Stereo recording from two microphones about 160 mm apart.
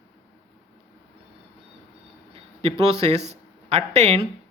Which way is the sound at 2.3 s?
40° right (ahead or behind).